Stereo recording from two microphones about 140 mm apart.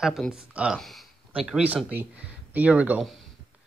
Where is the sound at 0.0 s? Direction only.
Centre (ahead or behind).